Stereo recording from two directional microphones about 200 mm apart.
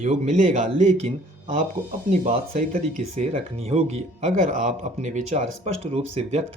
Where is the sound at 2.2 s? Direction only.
30° right (ahead or behind).